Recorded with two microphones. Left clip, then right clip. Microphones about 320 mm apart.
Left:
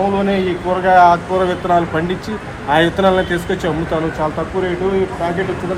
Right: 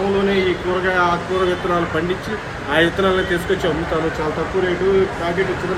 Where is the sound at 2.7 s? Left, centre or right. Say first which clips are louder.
Left 3 dB; centre.